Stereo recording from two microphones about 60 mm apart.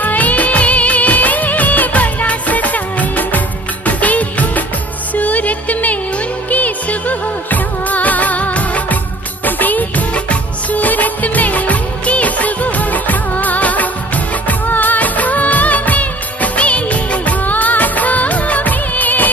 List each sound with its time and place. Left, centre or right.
0.0 s music of bollywood: left
5.1 s music: left
9.4 s music of bollywood: left